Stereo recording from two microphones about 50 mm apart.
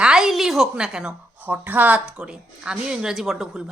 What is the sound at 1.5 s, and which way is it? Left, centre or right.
Speech, right.